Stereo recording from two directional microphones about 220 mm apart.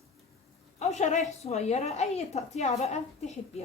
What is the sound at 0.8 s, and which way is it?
A woman's voice, 30° left (ahead or behind).